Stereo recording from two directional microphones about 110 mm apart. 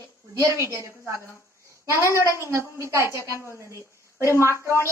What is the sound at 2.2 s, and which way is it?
A woman's voice, 25° right (ahead or behind).